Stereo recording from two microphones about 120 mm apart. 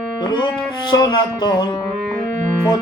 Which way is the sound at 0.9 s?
35° left (ahead or behind).